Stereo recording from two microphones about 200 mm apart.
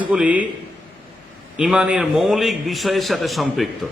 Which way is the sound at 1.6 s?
5° right (ahead or behind).